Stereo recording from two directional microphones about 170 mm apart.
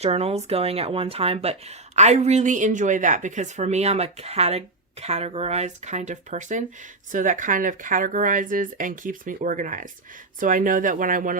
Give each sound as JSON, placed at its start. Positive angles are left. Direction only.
{"t": 0.0, "sound": "speech", "side_deg": -35}